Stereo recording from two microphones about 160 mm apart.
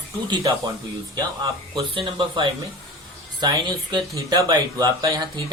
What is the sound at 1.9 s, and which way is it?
Speech, 35° right (ahead or behind).